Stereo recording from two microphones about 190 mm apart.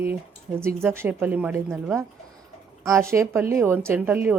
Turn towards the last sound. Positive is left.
turn(degrees=-10)  # may be behind; listen again after turning